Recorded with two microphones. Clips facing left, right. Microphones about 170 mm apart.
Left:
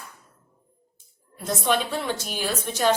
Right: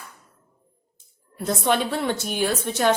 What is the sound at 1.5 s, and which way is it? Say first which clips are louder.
A woman's voice: right 2 dB; 60° right (ahead or behind).